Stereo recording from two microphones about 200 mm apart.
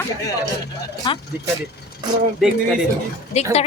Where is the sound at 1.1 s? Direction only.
25° left (ahead or behind).